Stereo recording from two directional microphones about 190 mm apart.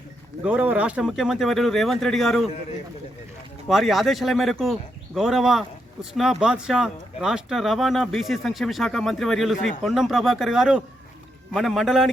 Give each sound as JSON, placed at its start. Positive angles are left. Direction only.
{"t": 0.4, "sound": "speech", "side_deg": -5}
{"t": 3.7, "sound": "speech", "side_deg": 0}